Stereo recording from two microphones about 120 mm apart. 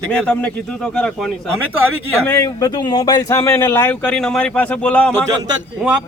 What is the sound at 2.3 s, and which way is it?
Speech, 25° left (ahead or behind).